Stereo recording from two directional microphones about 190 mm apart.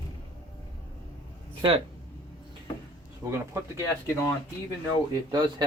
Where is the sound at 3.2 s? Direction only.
15° right (ahead or behind).